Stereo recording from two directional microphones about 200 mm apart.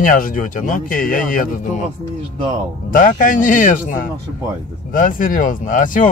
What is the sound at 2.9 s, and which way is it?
Speech, 40° left (ahead or behind).